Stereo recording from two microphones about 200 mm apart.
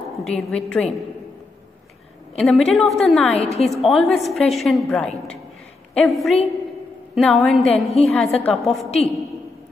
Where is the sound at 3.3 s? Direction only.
30° left (ahead or behind).